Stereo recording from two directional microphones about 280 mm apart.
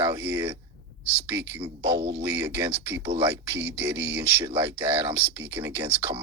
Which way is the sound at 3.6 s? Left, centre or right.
Centre.